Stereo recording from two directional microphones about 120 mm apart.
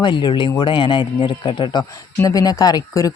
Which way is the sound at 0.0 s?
40° left (ahead or behind).